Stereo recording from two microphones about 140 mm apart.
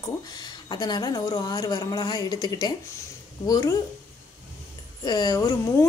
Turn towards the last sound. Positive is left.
turn(degrees=25)  # may be behind; listen again after turning